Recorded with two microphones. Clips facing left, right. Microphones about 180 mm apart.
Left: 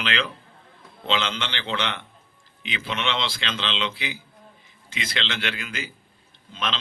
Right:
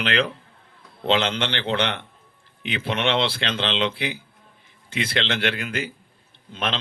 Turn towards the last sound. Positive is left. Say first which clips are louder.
# right 3 dB
turn(degrees=-55)  # may be behind; listen again after turning